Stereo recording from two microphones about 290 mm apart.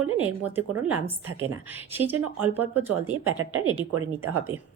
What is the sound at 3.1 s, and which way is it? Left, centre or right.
Speech, right.